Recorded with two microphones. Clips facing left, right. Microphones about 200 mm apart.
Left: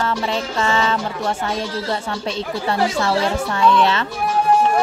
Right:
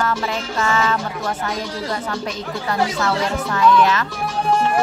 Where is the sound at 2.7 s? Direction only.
30° left (ahead or behind).